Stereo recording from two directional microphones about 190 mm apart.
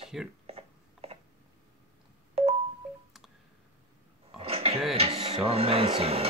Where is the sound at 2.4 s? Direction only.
30° right (ahead or behind).